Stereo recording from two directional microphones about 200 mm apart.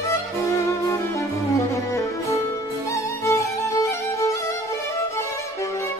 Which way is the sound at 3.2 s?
15° left (ahead or behind).